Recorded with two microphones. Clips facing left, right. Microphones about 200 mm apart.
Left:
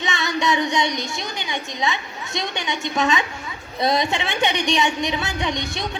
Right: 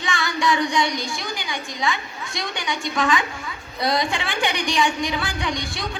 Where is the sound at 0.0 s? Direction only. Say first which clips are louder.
Left 1 dB; 20° left (ahead or behind).